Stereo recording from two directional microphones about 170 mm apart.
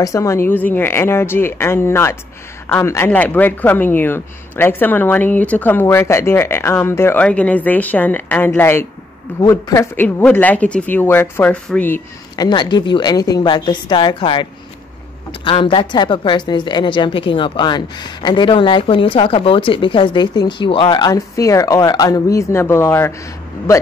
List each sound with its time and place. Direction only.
0.0 s speech: 20° left (ahead or behind)
12.4 s a woman's voice: 25° left (ahead or behind)